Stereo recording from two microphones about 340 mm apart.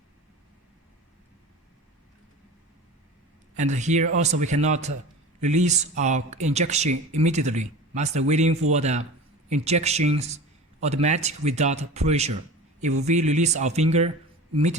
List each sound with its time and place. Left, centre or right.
3.5 s a man's voice: right